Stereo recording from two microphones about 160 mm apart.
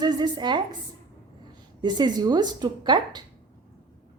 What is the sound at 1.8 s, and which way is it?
A woman's voice, 25° right (ahead or behind).